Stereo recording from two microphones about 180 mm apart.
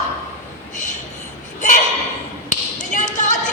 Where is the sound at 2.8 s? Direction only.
45° left (ahead or behind).